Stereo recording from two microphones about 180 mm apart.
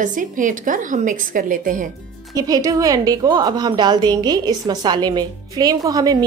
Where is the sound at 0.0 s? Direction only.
45° right (ahead or behind).